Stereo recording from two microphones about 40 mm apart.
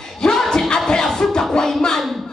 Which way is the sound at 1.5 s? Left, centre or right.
Centre.